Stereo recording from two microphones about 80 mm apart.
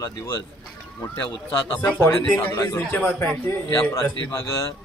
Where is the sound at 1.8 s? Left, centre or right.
Left.